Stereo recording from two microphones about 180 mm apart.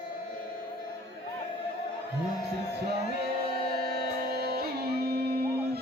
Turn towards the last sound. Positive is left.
turn(degrees=-60)  # may be behind; listen again after turning